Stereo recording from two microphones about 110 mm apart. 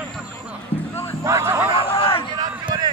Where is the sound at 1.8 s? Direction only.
55° left (ahead or behind).